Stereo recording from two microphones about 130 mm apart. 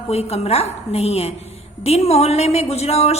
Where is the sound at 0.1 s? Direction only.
55° left (ahead or behind).